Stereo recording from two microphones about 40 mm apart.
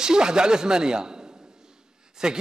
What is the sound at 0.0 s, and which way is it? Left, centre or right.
Speech, centre.